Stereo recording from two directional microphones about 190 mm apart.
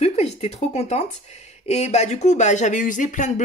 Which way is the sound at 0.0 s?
35° left (ahead or behind).